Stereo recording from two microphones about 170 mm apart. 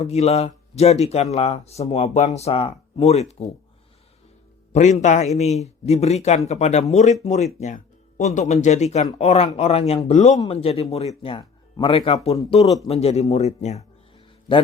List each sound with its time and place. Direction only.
0.0 s speech: 40° left (ahead or behind)
4.7 s a man's voice: 45° left (ahead or behind)